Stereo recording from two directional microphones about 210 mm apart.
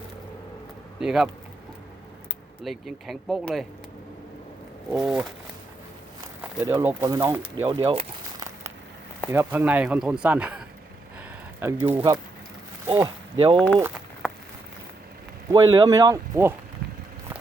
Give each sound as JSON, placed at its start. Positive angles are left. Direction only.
{"t": 0.9, "sound": "speech", "side_deg": 0}
{"t": 2.6, "sound": "speech", "side_deg": 0}
{"t": 4.9, "sound": "speech", "side_deg": -5}
{"t": 6.6, "sound": "speech", "side_deg": -15}
{"t": 11.6, "sound": "speech", "side_deg": -10}
{"t": 12.9, "sound": "speech", "side_deg": -25}
{"t": 15.4, "sound": "speech", "side_deg": -20}